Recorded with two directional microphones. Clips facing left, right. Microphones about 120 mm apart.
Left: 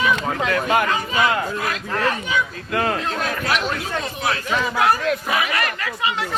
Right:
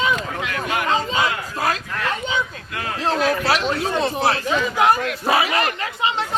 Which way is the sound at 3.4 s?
30° right (ahead or behind).